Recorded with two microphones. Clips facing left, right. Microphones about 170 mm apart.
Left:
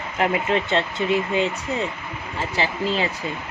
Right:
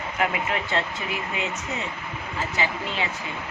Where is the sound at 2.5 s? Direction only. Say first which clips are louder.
Left 6 dB; 35° left (ahead or behind).